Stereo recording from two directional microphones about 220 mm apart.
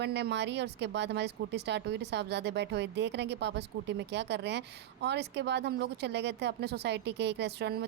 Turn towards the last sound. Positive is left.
turn(degrees=-50)  # may be behind; listen again after turning